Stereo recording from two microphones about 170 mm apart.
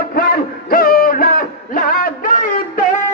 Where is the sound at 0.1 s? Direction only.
60° left (ahead or behind).